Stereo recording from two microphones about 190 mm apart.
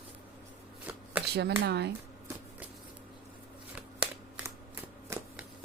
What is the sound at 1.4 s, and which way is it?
Speech, 60° right (ahead or behind).